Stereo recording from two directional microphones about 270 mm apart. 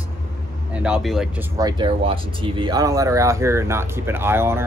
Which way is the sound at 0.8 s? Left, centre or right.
Centre.